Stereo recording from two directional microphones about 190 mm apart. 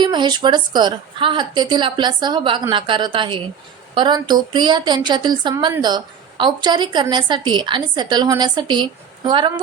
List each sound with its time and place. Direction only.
0.0 s a woman's voice: 25° right (ahead or behind)